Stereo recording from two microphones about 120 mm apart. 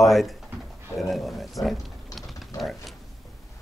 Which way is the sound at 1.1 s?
Centre (ahead or behind).